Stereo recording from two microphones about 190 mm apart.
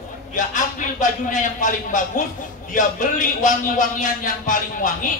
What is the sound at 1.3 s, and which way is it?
Speech, 40° left (ahead or behind).